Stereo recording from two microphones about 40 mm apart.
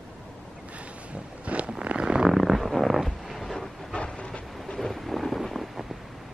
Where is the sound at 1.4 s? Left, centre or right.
Right.